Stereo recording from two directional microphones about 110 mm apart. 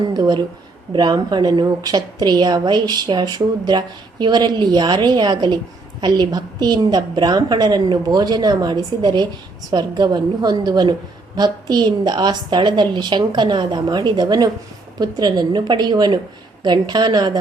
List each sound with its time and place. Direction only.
0.1 s a woman's voice: 40° right (ahead or behind)